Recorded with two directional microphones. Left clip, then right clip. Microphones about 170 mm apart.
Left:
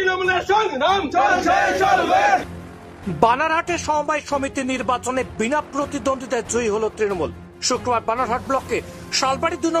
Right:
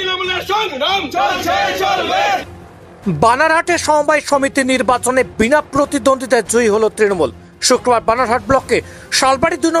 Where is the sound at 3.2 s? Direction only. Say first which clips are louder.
Right 6 dB; 30° right (ahead or behind).